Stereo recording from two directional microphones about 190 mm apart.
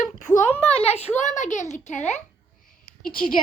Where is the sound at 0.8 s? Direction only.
35° left (ahead or behind).